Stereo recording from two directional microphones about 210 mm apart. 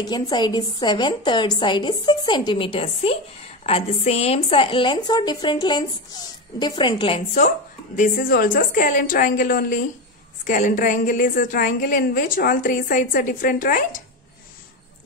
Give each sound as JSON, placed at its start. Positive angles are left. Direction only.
{"t": 0.0, "sound": "a woman's voice", "side_deg": 20}
{"t": 7.3, "sound": "a woman's voice", "side_deg": 35}